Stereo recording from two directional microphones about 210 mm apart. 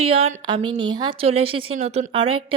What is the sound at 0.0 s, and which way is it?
A woman's voice, 25° right (ahead or behind).